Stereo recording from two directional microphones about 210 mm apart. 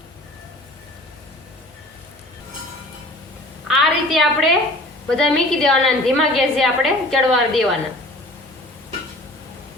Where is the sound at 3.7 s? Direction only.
Centre (ahead or behind).